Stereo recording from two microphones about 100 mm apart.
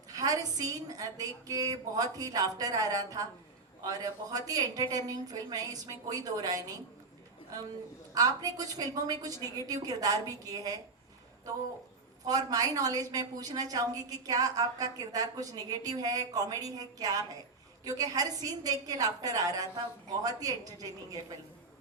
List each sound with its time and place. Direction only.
0.1 s a sound: 40° right (ahead or behind)
0.9 s a woman's voice: 40° right (ahead or behind)
8.1 s a woman's voice: 40° right (ahead or behind)
12.2 s a woman's voice: 40° right (ahead or behind)